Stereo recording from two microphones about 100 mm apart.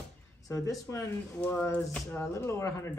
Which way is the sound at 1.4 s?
15° left (ahead or behind).